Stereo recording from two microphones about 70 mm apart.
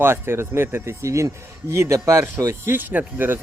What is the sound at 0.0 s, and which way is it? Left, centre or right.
A man's voice, right.